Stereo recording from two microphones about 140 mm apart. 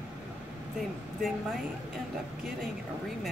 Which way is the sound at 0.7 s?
Centre (ahead or behind).